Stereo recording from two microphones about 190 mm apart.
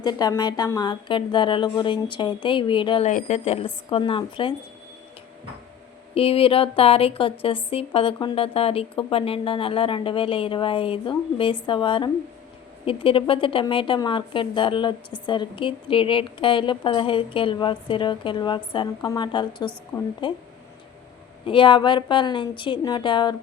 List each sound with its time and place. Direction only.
0.0 s a woman's voice: 20° left (ahead or behind)
3.1 s a woman's voice: 40° left (ahead or behind)
6.1 s a woman's voice: 30° left (ahead or behind)
21.4 s a woman's voice: 25° left (ahead or behind)